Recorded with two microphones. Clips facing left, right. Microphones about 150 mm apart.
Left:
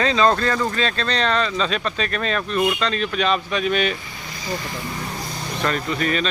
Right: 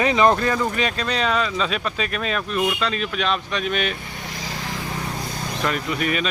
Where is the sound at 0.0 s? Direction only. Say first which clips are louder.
Right 1 dB; 15° right (ahead or behind); by 3.9 s centre (ahead or behind).